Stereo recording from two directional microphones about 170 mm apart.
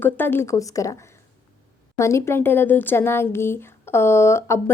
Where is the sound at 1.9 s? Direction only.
15° left (ahead or behind).